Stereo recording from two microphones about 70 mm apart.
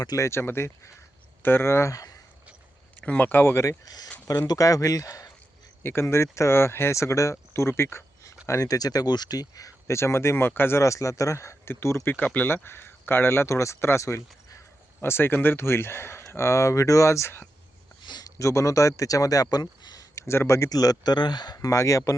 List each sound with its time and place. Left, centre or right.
0.2 s speech: left
3.0 s speech: left
3.8 s speech: left
4.4 s speech: left
5.8 s speech: left
8.4 s speech: left
12.1 s speech: left
15.0 s speech: left
18.0 s a sound: left
18.3 s speech: left
20.1 s speech: left
20.7 s speech: left
21.6 s speech: left